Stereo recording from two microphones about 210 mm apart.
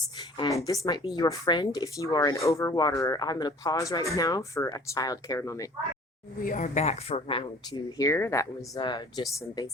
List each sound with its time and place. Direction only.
0.2 s speech: 20° left (ahead or behind)
6.4 s speech: 40° left (ahead or behind); by 9.2 s 20° left (ahead or behind)